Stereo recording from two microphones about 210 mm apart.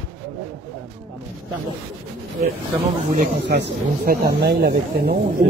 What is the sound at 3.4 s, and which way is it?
Speech, 55° right (ahead or behind).